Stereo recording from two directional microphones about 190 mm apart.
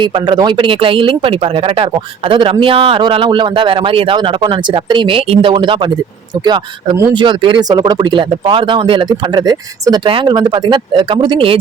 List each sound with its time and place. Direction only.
0.0 s speech: 25° right (ahead or behind)